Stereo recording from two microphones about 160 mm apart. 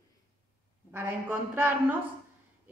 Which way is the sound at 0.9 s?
10° right (ahead or behind).